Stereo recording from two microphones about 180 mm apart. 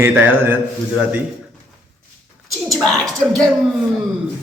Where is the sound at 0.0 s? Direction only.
10° right (ahead or behind).